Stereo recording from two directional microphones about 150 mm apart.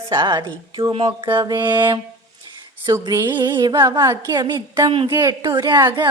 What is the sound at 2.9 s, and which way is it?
A woman's voice, 20° right (ahead or behind).